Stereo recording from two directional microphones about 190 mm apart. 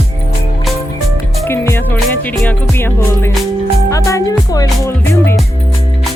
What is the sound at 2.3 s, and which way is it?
Speech, 10° left (ahead or behind).